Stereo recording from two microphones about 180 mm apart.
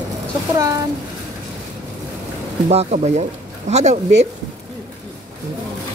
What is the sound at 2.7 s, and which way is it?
Speech, 35° right (ahead or behind).